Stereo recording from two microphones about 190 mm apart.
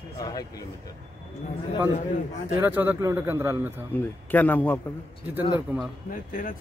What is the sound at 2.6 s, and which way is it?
Speech, 10° right (ahead or behind).